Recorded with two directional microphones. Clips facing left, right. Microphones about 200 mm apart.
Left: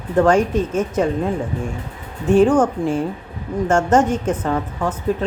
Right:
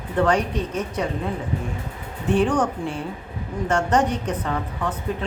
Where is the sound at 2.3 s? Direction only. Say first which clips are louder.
Left 7 dB; 45° left (ahead or behind).